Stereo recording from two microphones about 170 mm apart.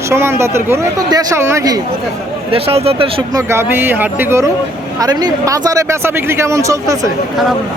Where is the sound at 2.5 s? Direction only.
35° right (ahead or behind).